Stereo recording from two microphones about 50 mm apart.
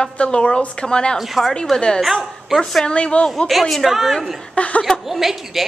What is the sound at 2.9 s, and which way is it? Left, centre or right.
Speech, left.